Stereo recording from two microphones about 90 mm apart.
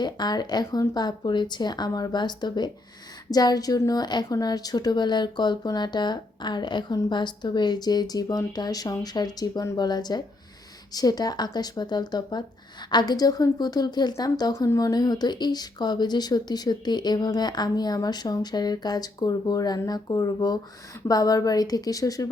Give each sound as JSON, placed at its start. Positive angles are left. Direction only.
{"t": 0.0, "sound": "speech", "side_deg": 50}